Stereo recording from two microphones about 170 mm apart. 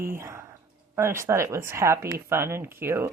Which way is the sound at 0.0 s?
15° right (ahead or behind).